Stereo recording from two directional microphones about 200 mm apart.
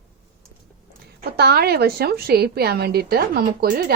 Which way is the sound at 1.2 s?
55° right (ahead or behind).